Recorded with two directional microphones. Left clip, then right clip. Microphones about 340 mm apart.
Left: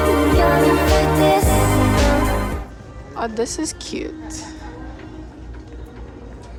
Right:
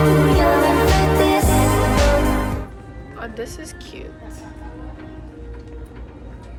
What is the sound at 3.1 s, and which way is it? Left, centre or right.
A woman's voice, centre.